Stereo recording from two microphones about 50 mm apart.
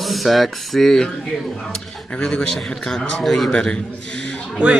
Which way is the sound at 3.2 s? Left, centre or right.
Centre.